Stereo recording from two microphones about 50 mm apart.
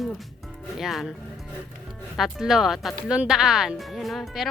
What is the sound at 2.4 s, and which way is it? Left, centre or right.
Speech, centre.